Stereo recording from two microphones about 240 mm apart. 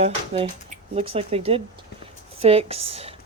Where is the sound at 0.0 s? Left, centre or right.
Right.